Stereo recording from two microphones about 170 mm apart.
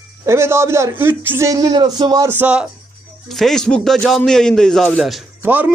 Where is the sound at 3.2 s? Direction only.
Centre (ahead or behind).